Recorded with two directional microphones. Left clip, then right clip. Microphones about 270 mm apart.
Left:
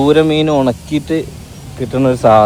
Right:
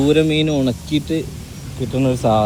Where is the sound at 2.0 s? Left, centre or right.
Left.